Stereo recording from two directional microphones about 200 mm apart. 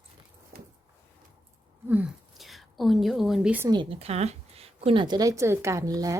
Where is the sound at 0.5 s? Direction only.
50° right (ahead or behind).